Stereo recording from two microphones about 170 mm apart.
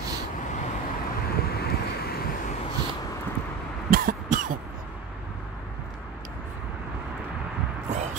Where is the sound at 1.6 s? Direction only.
70° left (ahead or behind).